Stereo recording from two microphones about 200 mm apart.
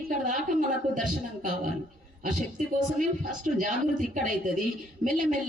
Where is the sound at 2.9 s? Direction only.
40° right (ahead or behind).